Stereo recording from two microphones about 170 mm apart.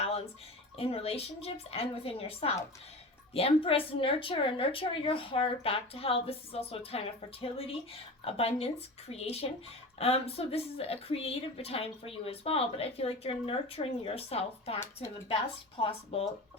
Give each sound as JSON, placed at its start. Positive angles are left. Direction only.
{"t": 0.8, "sound": "a woman's voice", "side_deg": 35}
{"t": 15.8, "sound": "a woman's voice", "side_deg": 35}